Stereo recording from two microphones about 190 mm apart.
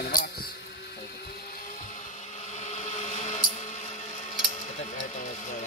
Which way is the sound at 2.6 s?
35° left (ahead or behind).